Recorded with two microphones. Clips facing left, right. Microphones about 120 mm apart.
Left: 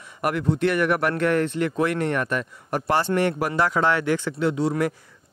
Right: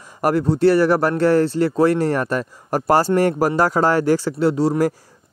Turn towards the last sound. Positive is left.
turn(degrees=-35)  # may be behind; listen again after turning